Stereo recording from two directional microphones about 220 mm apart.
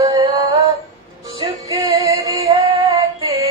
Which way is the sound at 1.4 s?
15° right (ahead or behind).